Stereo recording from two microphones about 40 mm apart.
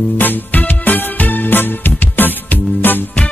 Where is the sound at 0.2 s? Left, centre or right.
Left.